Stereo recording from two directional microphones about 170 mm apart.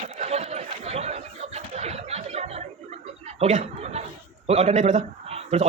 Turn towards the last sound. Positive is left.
turn(degrees=-40)  # may be behind; listen again after turning